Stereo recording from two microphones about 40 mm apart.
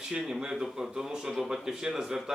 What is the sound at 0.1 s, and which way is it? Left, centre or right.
Speech, centre.